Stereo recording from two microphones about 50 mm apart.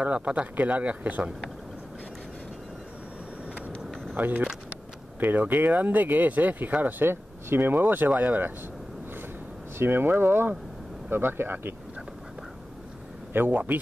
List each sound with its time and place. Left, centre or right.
0.0 s speech: right
4.2 s speech: right
9.8 s speech: right
13.3 s speech: right